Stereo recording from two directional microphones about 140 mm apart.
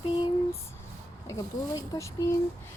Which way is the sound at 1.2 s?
25° left (ahead or behind).